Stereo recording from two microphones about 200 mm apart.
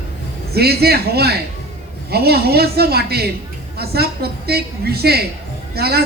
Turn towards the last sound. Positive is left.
turn(degrees=-50)  # may be behind; listen again after turning